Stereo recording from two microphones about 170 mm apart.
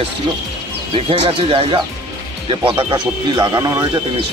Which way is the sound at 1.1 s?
30° right (ahead or behind).